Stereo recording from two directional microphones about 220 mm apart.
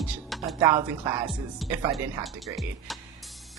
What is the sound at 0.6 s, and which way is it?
Speech, 15° right (ahead or behind).